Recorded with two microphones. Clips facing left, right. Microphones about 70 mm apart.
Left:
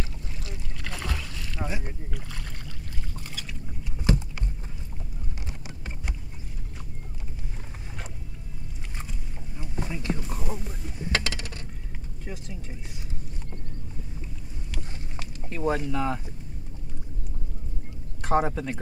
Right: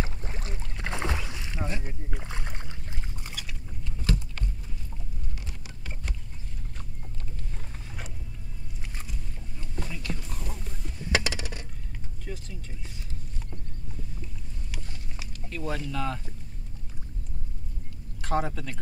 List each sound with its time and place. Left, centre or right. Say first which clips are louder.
0.0 s boat: right 2 dB; right
1.3 s a sound: even; right
1.7 s boat: left 1 dB; centre
2.0 s rowboat: right 1 dB; right
4.0 s a sound: left 5 dB; left
5.5 s a sound: left 3 dB; left
9.6 s boat: left 4 dB; left
10.2 s a sound: left 6 dB; centre
11.1 s coin: right 1 dB; centre
12.3 s vehicle: even; centre
15.4 s speech: left 6 dB; left
18.2 s speech: left 5 dB; left